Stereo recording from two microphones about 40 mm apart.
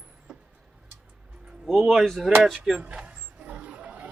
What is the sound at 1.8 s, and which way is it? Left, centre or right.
Speech, centre.